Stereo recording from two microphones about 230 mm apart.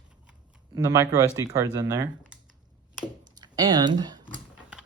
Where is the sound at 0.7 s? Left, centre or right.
Centre.